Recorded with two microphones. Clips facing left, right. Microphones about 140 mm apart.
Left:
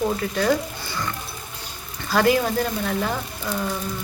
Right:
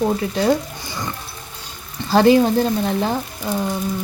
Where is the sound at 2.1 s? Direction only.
25° right (ahead or behind).